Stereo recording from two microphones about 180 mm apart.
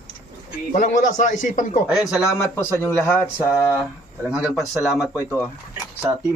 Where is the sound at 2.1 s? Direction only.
15° left (ahead or behind).